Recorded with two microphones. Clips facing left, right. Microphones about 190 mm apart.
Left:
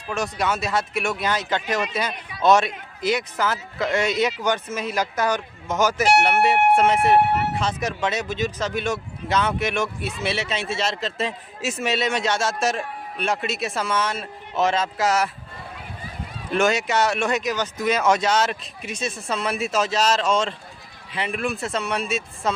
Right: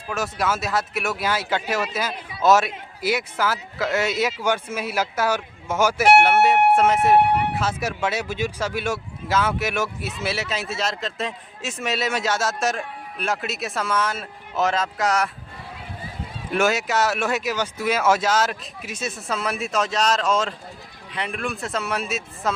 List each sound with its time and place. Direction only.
0.1 s a man's voice: 5° right (ahead or behind)
16.5 s a man's voice: 5° right (ahead or behind)